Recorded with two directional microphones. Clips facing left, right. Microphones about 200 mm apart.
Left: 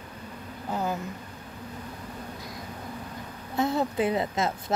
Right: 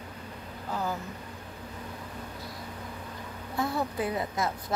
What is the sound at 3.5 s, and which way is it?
Speech, 20° left (ahead or behind).